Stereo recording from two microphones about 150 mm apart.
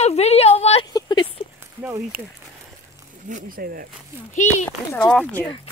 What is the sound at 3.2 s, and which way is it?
Speech, 65° right (ahead or behind).